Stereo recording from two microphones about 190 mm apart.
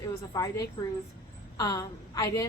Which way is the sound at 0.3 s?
20° left (ahead or behind).